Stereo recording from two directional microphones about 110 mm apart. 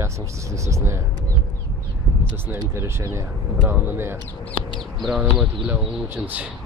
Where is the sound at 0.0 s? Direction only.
25° right (ahead or behind).